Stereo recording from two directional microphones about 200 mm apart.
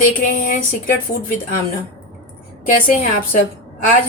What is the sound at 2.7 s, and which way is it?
Speech, 45° left (ahead or behind).